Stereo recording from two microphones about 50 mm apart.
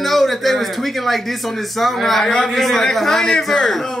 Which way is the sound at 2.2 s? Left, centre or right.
Centre.